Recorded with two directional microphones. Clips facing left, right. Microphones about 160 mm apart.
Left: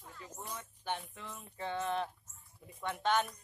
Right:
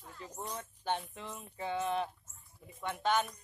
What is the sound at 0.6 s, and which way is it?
Music, 30° right (ahead or behind).